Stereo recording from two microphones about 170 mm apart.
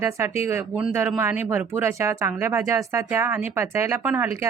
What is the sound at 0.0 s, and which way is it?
Speech, 15° right (ahead or behind).